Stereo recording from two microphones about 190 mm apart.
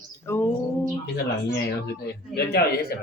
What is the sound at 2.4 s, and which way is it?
Speech, 55° left (ahead or behind).